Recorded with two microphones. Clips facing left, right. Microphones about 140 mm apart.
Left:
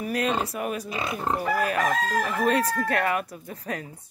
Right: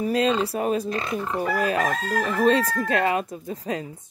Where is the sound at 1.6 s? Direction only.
25° right (ahead or behind).